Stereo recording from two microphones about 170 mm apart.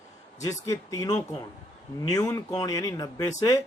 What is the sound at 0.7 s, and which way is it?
Speech, 20° left (ahead or behind).